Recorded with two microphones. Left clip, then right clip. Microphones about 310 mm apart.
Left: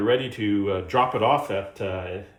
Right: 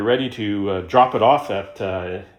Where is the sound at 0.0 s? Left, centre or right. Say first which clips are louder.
Right 3 dB; right.